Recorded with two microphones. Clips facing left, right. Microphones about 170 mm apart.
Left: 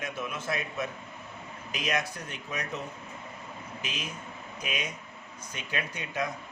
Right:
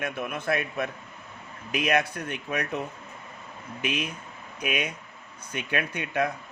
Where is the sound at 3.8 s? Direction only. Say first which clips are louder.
Right 10 dB; 60° right (ahead or behind).